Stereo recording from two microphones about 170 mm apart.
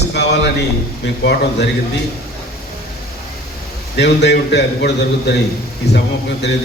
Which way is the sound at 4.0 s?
85° left.